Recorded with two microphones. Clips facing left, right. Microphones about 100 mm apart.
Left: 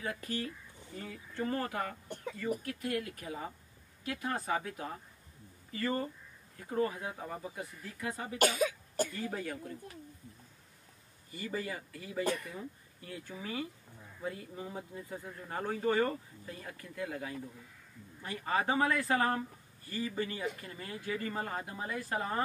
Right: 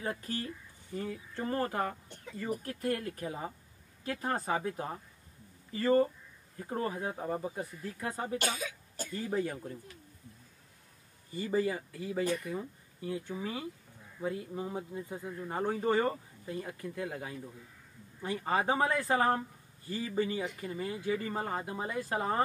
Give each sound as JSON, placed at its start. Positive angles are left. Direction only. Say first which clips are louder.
{"t": 0.0, "sound": "speech", "louder": "right 1 dB", "side_deg": -35}
{"t": 8.5, "sound": "cough", "louder": "left 9 dB", "side_deg": 50}
{"t": 9.1, "sound": "speech", "louder": "right 5 dB", "side_deg": -30}
{"t": 11.3, "sound": "speech", "louder": "right 7 dB", "side_deg": -30}